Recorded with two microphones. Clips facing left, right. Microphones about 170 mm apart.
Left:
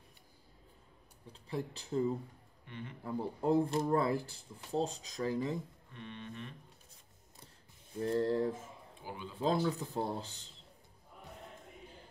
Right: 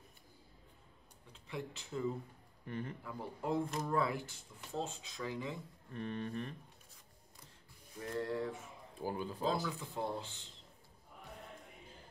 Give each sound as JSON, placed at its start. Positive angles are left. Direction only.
{"t": 1.3, "sound": "speech", "side_deg": 35}
{"t": 2.6, "sound": "speech", "side_deg": -40}
{"t": 3.0, "sound": "speech", "side_deg": 35}
{"t": 5.9, "sound": "speech", "side_deg": -40}
{"t": 8.0, "sound": "speech", "side_deg": 30}
{"t": 9.0, "sound": "speech", "side_deg": -40}
{"t": 9.7, "sound": "speech", "side_deg": 40}